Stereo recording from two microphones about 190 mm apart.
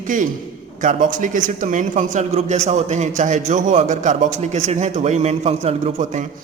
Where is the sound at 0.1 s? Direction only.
45° right (ahead or behind).